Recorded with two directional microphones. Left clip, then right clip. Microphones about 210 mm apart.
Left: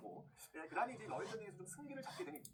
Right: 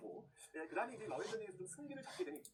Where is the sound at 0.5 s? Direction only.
20° left (ahead or behind).